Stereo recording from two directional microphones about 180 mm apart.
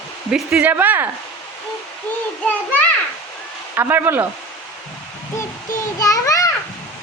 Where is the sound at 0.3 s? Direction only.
5° right (ahead or behind).